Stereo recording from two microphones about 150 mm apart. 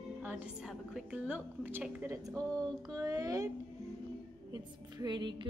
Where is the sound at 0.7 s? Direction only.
5° right (ahead or behind).